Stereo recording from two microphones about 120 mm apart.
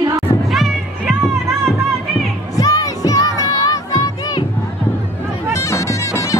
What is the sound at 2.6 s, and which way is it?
Music, 30° left (ahead or behind).